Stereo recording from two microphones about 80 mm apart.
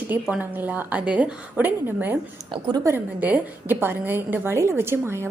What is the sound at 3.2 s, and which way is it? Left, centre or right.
A woman's voice, right.